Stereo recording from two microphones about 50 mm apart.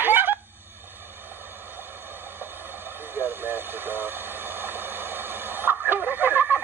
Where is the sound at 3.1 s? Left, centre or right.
Right.